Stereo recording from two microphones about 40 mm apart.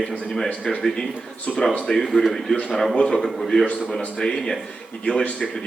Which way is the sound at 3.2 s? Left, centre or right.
Centre.